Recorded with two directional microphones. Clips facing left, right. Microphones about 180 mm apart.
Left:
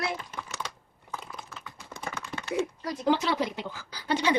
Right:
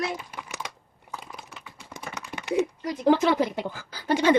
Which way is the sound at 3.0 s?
55° right (ahead or behind).